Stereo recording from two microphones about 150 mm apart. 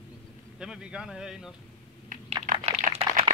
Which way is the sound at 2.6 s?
40° right (ahead or behind).